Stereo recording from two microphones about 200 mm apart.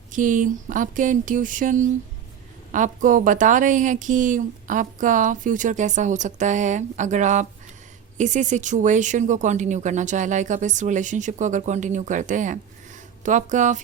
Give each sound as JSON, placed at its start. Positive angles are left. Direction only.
{"t": 0.1, "sound": "speech", "side_deg": -40}